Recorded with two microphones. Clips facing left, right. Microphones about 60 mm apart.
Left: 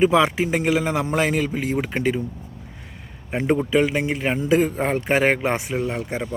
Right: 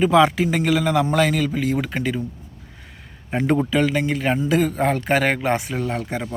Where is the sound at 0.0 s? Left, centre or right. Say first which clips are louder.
Right 2 dB; centre.